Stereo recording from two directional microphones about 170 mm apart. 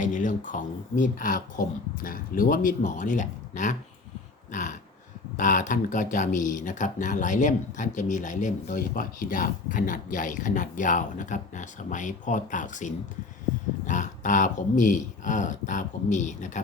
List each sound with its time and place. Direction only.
0.0 s speech: 50° left (ahead or behind)